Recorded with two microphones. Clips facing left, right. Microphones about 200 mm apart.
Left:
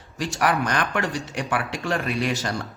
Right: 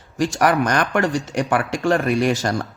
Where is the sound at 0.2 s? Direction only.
45° right (ahead or behind).